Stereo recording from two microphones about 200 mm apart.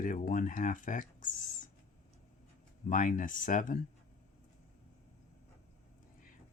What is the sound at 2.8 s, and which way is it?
Speech, 40° left (ahead or behind).